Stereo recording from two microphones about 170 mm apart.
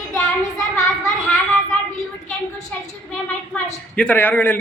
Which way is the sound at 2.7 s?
5° left (ahead or behind).